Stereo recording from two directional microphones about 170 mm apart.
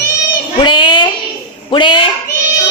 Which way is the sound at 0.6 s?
30° left (ahead or behind).